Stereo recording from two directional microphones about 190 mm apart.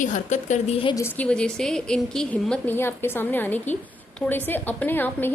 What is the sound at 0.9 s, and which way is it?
A woman's voice, 10° left (ahead or behind).